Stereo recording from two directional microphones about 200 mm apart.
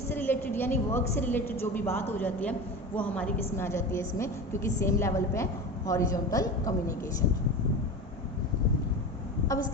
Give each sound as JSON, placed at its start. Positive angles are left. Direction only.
{"t": 0.1, "sound": "a woman's voice", "side_deg": 10}